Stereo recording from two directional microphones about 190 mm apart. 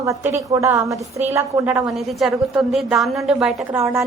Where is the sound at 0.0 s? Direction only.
15° right (ahead or behind).